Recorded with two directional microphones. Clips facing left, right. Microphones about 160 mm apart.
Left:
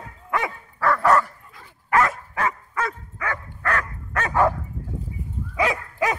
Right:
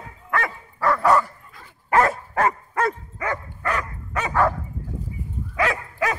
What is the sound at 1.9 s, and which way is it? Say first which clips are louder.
Dog: right 2 dB; 35° right (ahead or behind).